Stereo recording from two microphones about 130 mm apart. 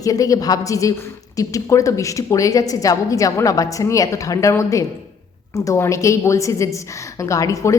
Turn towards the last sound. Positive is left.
turn(degrees=25)  # may be behind; listen again after turning